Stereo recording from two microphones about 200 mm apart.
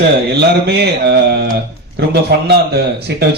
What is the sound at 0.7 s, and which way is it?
Speech, 55° right (ahead or behind).